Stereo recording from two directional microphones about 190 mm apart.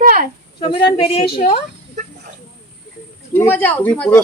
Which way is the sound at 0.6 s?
30° left (ahead or behind).